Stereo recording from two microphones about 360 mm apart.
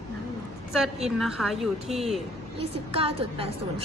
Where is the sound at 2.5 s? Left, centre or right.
Centre.